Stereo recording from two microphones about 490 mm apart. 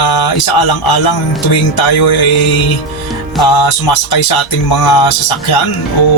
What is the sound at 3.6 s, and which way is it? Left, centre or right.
Speech, left.